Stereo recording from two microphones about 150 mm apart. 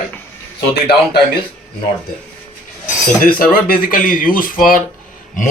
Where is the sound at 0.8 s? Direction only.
90° left.